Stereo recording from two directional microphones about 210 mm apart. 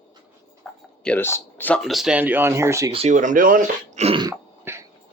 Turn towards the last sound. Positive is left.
turn(degrees=-15)  # may be behind; listen again after turning